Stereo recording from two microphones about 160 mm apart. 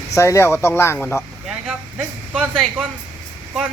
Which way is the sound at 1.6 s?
5° right (ahead or behind).